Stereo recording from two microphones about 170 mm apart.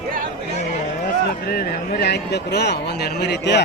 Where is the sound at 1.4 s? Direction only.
60° left (ahead or behind); by 3.6 s 85° left.